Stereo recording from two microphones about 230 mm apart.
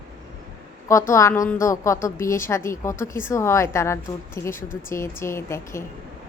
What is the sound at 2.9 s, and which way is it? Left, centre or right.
Speech, left.